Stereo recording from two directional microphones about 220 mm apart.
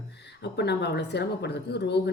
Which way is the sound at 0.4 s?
50° left (ahead or behind).